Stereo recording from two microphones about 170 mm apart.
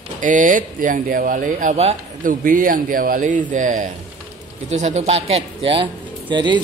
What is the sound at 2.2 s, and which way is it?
Speech, 55° right (ahead or behind).